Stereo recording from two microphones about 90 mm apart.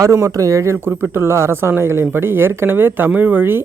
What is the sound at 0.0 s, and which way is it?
Speech, 35° right (ahead or behind).